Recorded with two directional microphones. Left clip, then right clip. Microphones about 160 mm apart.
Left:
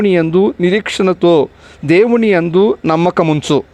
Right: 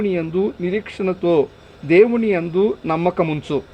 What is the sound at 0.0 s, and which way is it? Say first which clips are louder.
Speech: left 9 dB; 45° left (ahead or behind).